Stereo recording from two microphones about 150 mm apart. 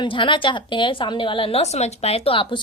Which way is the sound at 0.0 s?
35° left (ahead or behind).